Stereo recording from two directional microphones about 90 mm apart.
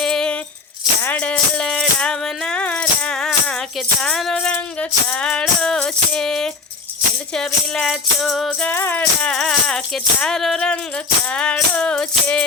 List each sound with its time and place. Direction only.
0.0 s a sound: 5° left (ahead or behind)
1.0 s music: 15° left (ahead or behind)
4.8 s speech: 15° left (ahead or behind)
7.3 s music: 5° left (ahead or behind)
8.5 s speech: 15° left (ahead or behind)